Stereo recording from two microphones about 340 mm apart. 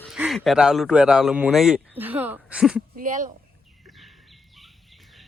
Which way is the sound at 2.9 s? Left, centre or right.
Right.